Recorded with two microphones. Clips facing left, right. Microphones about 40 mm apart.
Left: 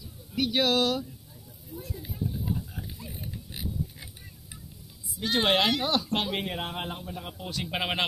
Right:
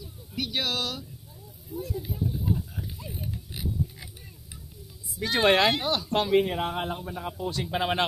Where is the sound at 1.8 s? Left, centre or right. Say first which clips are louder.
Right 4 dB; centre.